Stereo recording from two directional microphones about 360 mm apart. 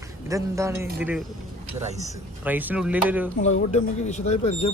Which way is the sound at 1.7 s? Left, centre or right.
Centre.